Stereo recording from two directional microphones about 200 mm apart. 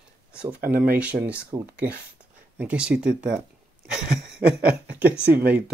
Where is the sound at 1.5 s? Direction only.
15° right (ahead or behind).